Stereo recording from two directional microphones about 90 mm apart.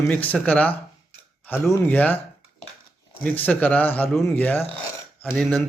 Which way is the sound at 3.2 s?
20° left (ahead or behind).